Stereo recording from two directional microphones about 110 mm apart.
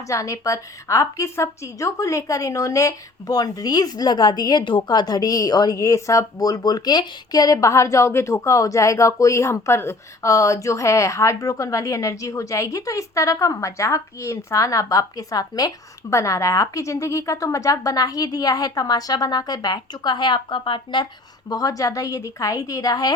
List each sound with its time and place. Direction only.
0.1 s a woman's voice: 30° left (ahead or behind); by 21.1 s 45° left (ahead or behind)
21.5 s a woman's voice: 30° left (ahead or behind)